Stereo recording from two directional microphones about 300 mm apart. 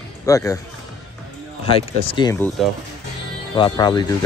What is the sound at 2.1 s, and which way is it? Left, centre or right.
Speech, centre.